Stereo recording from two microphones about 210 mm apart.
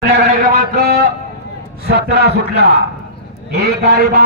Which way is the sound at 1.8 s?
50° right (ahead or behind).